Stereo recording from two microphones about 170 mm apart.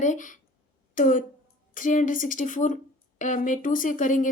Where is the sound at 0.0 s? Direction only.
50° left (ahead or behind).